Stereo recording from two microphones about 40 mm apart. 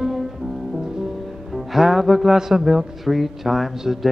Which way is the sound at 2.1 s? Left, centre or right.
Centre.